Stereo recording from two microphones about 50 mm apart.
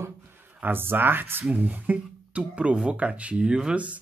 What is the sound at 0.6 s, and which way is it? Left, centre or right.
Speech, right.